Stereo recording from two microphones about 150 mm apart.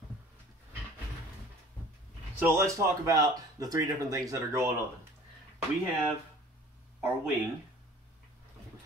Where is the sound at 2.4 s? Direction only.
20° right (ahead or behind).